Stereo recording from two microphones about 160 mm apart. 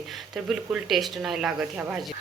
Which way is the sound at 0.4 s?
Centre (ahead or behind).